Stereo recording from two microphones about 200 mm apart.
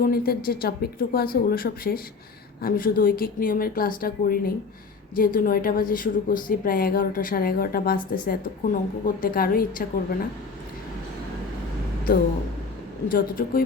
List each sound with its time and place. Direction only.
0.0 s a woman's voice: 50° left (ahead or behind)
13.1 s a woman's voice: 45° left (ahead or behind)